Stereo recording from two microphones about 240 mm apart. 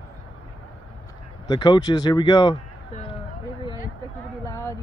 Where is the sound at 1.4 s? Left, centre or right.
Centre.